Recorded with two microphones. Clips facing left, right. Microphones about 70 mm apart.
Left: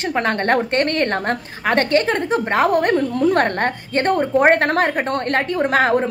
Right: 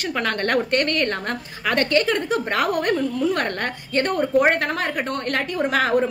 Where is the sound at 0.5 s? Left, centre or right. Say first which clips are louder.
Left 1 dB; left.